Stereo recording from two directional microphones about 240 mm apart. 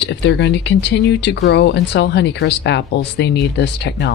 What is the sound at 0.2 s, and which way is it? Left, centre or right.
Speech, left.